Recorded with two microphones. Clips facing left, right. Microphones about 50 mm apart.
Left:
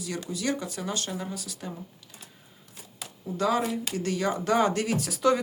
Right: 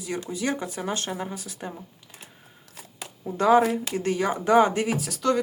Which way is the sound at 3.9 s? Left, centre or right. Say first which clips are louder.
Right 3 dB; right.